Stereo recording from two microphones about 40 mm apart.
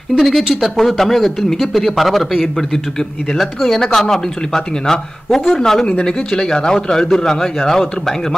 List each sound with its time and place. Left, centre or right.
0.2 s speech: centre
0.8 s speech: centre
5.9 s speech: left